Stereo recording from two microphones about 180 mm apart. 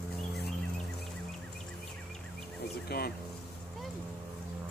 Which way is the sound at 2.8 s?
60° left (ahead or behind).